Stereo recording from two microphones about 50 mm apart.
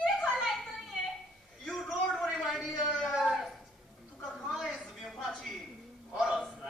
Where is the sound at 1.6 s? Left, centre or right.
Centre.